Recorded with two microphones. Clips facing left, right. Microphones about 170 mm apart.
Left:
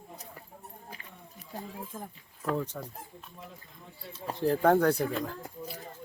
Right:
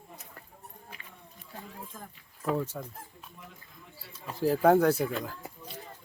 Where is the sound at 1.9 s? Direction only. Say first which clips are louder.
Left 5 dB; 20° left (ahead or behind).